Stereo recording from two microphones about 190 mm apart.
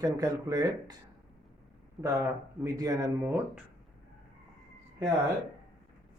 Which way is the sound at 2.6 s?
15° right (ahead or behind).